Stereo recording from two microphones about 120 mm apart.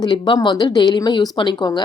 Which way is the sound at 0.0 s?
35° left (ahead or behind).